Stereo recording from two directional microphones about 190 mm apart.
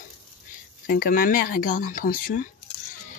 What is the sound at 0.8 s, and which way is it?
Speech, 50° left (ahead or behind).